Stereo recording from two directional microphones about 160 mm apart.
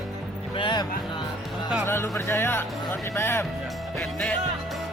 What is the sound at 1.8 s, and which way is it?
Speech, 15° left (ahead or behind).